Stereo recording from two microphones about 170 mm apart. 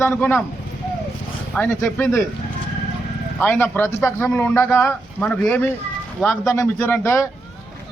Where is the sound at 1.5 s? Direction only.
10° left (ahead or behind).